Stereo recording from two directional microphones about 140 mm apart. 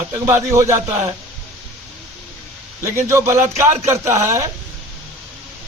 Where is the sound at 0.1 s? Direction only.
20° right (ahead or behind).